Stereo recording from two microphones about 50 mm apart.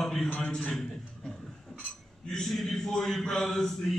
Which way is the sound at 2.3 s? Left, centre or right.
Centre.